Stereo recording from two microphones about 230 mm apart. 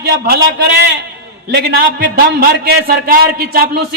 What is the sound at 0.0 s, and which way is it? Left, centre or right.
A man's voice, right.